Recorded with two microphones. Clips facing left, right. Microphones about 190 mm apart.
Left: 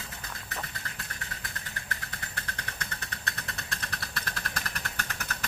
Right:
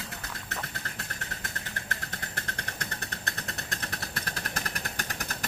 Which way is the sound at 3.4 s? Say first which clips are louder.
Right 2 dB; 40° right (ahead or behind).